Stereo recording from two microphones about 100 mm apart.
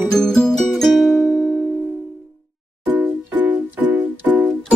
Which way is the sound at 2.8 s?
15° right (ahead or behind).